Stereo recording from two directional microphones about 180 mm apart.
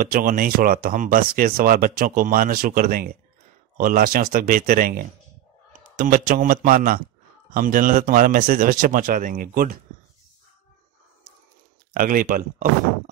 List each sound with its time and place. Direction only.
0.0 s speech: 50° right (ahead or behind)
11.9 s speech: 50° right (ahead or behind)